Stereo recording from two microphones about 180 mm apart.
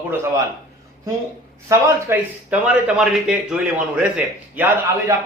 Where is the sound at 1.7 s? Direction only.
15° right (ahead or behind).